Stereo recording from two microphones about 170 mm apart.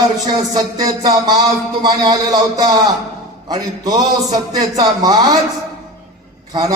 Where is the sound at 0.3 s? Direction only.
25° right (ahead or behind).